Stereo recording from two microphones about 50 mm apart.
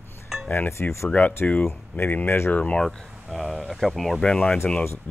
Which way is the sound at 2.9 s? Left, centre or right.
Centre.